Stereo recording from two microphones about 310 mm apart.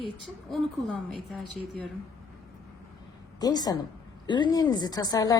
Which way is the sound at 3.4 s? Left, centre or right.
Centre.